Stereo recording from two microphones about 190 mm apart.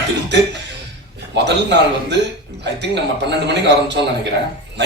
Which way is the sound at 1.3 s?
65° right (ahead or behind).